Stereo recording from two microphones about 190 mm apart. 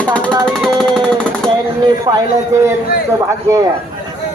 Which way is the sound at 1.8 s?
20° right (ahead or behind).